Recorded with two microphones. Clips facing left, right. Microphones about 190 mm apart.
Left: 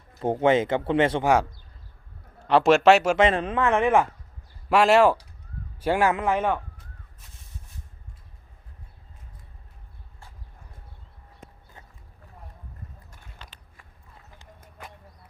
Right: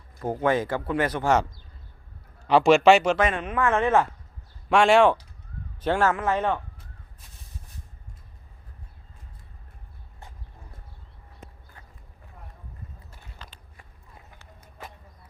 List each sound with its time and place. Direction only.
0.2 s speech: 25° left (ahead or behind)
2.5 s a man's voice: centre (ahead or behind)
3.2 s speech: 30° left (ahead or behind)
3.6 s speech: 15° left (ahead or behind)
4.7 s a man's voice: 5° left (ahead or behind)